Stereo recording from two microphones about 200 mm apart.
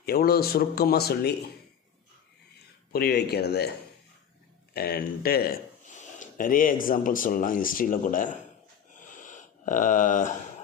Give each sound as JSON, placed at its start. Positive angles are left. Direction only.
{"t": 0.0, "sound": "speech", "side_deg": 50}
{"t": 2.9, "sound": "speech", "side_deg": 50}
{"t": 4.7, "sound": "speech", "side_deg": 50}
{"t": 9.0, "sound": "a sound", "side_deg": 40}